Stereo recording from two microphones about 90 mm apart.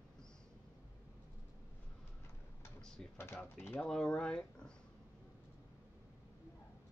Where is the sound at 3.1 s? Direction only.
25° left (ahead or behind).